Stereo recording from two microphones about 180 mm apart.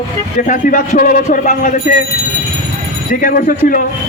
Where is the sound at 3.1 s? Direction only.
50° left (ahead or behind).